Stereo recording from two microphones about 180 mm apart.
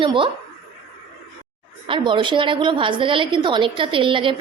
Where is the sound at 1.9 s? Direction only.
25° right (ahead or behind).